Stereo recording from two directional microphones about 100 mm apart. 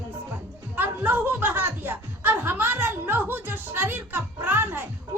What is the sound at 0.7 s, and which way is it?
A woman's voice, 20° right (ahead or behind).